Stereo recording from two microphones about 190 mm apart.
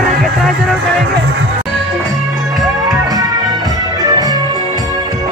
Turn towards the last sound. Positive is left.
turn(degrees=-20)  # may be behind; listen again after turning